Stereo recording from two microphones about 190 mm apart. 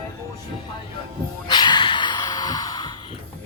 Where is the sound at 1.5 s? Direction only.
25° left (ahead or behind).